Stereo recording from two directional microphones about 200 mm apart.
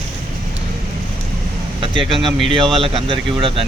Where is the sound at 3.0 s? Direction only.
25° right (ahead or behind).